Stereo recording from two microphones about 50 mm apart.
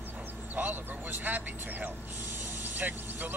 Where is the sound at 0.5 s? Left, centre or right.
Right.